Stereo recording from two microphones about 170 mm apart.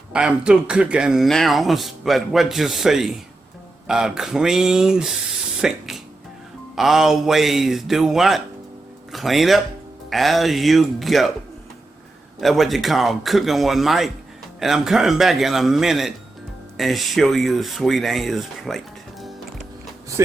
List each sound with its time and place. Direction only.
0.1 s speech: 5° right (ahead or behind)
12.4 s speech: centre (ahead or behind)
20.2 s speech: 20° right (ahead or behind)